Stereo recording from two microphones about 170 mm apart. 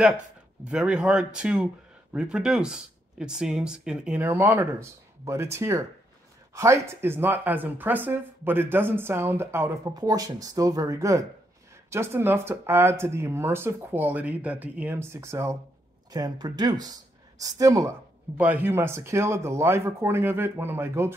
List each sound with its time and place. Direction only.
0.7 s speech: 5° right (ahead or behind)